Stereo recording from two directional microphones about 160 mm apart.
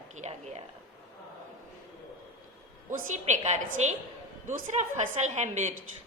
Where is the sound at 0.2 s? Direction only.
45° right (ahead or behind).